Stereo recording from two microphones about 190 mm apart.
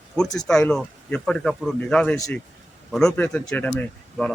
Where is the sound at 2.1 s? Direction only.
15° left (ahead or behind).